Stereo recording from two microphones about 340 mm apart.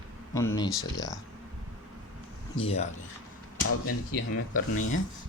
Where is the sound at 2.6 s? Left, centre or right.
Centre.